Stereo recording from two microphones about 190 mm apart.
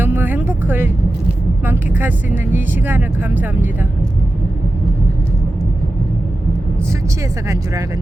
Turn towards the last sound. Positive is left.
turn(degrees=-15)  # may be behind; listen again after turning